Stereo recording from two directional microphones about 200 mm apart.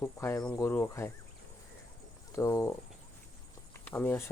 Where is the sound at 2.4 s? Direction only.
15° left (ahead or behind).